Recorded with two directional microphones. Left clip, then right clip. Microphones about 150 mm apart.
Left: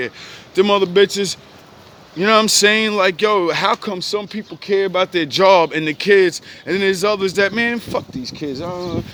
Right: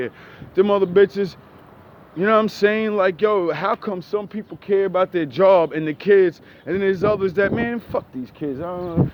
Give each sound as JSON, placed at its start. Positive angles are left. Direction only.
{"t": 0.5, "sound": "speech", "side_deg": 25}